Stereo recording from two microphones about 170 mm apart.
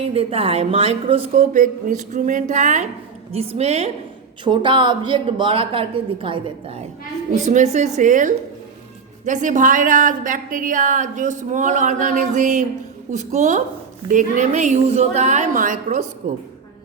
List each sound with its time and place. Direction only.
0.1 s a woman's voice: 35° right (ahead or behind)
1.4 s a woman's voice: 50° right (ahead or behind)